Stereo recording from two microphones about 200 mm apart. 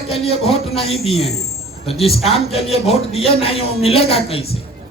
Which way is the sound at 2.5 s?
30° left (ahead or behind).